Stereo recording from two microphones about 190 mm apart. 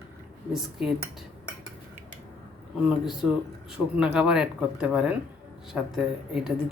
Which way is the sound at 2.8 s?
5° right (ahead or behind).